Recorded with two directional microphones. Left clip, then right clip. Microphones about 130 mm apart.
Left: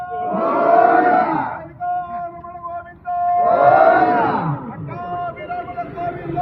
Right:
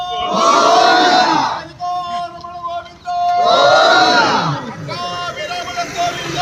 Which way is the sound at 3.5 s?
Centre (ahead or behind).